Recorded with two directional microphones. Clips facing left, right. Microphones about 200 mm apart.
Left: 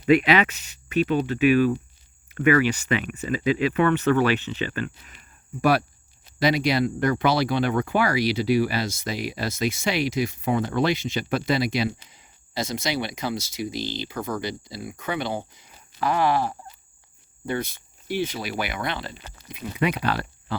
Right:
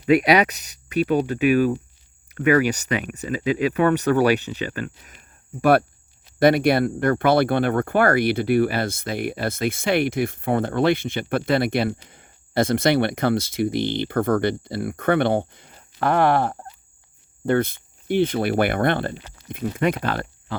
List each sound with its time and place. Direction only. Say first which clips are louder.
0.4 s speech: right 2 dB; 40° right (ahead or behind)
6.4 s speech: right 5 dB; 55° right (ahead or behind)